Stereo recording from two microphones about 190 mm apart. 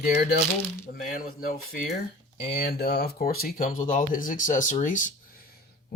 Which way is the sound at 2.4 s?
55° left (ahead or behind).